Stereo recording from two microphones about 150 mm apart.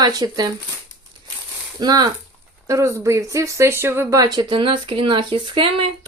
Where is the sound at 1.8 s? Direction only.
30° right (ahead or behind).